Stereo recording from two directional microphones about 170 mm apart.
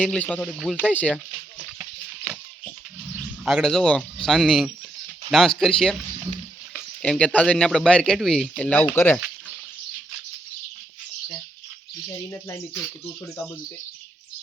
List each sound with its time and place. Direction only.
0.0 s speech: 10° left (ahead or behind)
1.5 s frying: 5° right (ahead or behind)
3.4 s speech: centre (ahead or behind)
7.0 s speech: 5° left (ahead or behind)
12.0 s speech: 15° left (ahead or behind)